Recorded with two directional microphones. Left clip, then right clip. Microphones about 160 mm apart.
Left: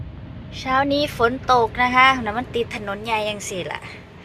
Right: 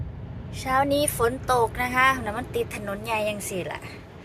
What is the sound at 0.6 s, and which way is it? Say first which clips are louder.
A woman's voice: left 3 dB; 5° right (ahead or behind).